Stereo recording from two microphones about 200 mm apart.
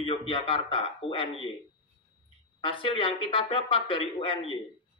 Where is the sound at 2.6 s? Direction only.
25° left (ahead or behind).